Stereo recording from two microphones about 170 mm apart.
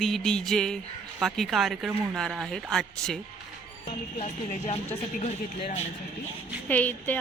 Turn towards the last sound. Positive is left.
turn(degrees=10)  # may be behind; listen again after turning